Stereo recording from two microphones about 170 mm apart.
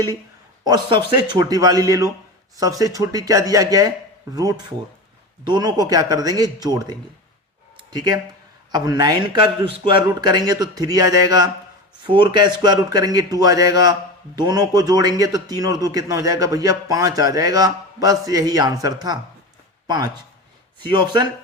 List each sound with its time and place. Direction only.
0.6 s a man's voice: 25° right (ahead or behind)
5.5 s a man's voice: 25° right (ahead or behind)
7.8 s a sound: 25° right (ahead or behind)
8.7 s a man's voice: 20° right (ahead or behind)
20.8 s a man's voice: 25° right (ahead or behind)